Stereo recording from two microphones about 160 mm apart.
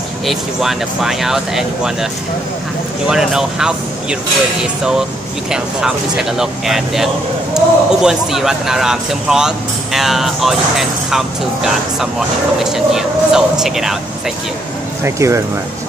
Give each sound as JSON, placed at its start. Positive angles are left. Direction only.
{"t": 0.3, "sound": "speech", "side_deg": 0}
{"t": 3.1, "sound": "speech", "side_deg": -5}
{"t": 5.5, "sound": "speech", "side_deg": -5}
{"t": 15.0, "sound": "speech", "side_deg": -20}